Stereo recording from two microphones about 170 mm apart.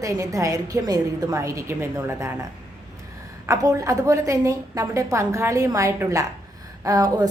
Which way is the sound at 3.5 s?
20° right (ahead or behind).